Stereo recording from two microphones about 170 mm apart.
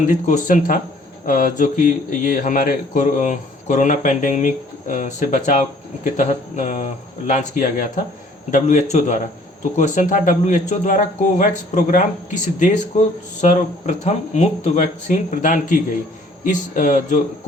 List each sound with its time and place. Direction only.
0.0 s a man's voice: 45° left (ahead or behind)